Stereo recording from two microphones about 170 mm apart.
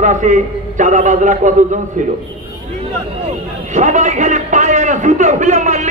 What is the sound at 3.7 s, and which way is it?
A man's voice, 45° right (ahead or behind).